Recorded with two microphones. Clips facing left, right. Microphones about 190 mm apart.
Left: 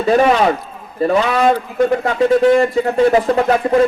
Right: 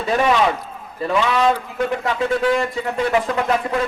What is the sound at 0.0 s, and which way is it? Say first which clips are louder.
Speech: left 5 dB; 40° left (ahead or behind).